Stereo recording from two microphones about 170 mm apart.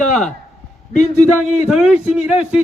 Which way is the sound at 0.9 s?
40° left (ahead or behind).